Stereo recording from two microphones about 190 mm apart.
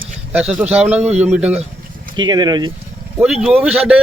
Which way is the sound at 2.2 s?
20° right (ahead or behind).